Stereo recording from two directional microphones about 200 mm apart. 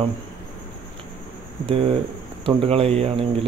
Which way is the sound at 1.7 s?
30° right (ahead or behind).